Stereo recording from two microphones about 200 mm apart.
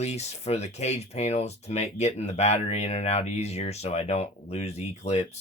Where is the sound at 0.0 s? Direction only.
35° left (ahead or behind).